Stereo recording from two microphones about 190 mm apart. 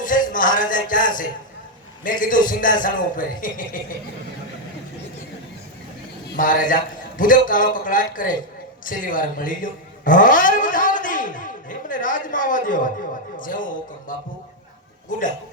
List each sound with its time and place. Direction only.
0.0 s a sound: 45° left (ahead or behind)
2.0 s a man's voice: 45° left (ahead or behind)
6.3 s a man's voice: 45° left (ahead or behind)